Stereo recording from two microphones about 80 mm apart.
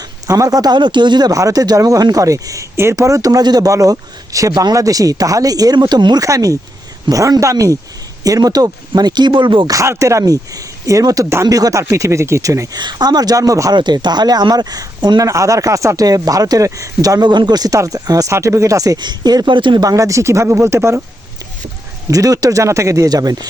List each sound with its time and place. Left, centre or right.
0.3 s speech: right
1.3 s speech: right
5.8 s speech: right
6.2 s speech: right
9.6 s speech: right
12.8 s speech: right
13.7 s speech: right
15.2 s speech: right
17.2 s speech: right
18.9 s speech: right
19.5 s speech: right
19.8 s speech: right
22.1 s speech: right